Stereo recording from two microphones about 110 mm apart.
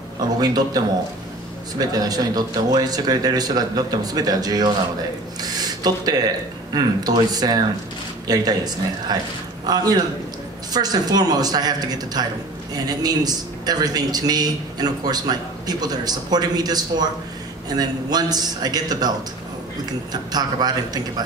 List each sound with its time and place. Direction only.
0.4 s a man's voice: 35° right (ahead or behind)
5.4 s a sound: 35° right (ahead or behind)
6.7 s a man's voice: 35° right (ahead or behind)